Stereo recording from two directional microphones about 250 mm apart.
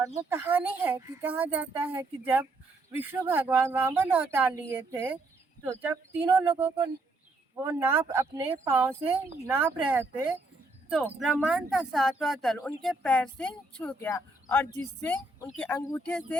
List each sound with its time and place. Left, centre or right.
0.2 s speech: centre
9.0 s speech: right
9.5 s speech: centre